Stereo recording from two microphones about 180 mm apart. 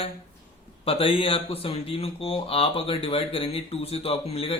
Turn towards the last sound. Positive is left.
turn(degrees=35)  # may be behind; listen again after turning